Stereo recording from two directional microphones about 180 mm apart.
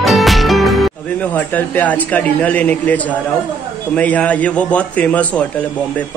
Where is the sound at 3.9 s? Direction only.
10° left (ahead or behind).